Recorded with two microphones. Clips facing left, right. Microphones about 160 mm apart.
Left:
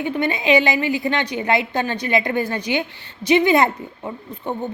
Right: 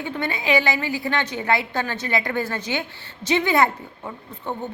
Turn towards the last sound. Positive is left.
turn(degrees=15)  # may be behind; listen again after turning